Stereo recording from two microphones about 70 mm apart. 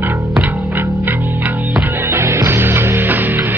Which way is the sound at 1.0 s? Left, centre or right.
Right.